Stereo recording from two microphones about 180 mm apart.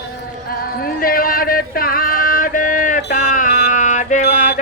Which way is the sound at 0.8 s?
55° left (ahead or behind).